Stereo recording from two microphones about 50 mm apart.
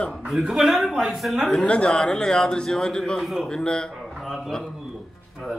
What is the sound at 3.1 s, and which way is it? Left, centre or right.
Speech, centre.